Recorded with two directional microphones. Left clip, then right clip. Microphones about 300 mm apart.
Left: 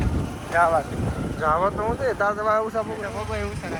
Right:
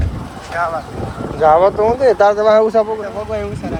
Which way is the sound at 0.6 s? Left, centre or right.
Centre.